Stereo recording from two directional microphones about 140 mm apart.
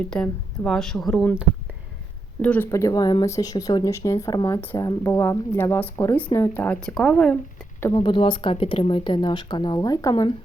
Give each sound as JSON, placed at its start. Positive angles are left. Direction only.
{"t": 0.1, "sound": "speech", "side_deg": 5}
{"t": 2.4, "sound": "speech", "side_deg": 10}
{"t": 2.6, "sound": "speech", "side_deg": 20}
{"t": 8.0, "sound": "speech", "side_deg": 35}